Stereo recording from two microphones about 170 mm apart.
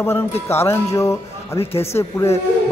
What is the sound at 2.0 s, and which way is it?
Speech, 15° left (ahead or behind).